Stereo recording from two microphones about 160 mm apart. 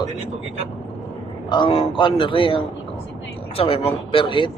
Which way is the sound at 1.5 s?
35° left (ahead or behind).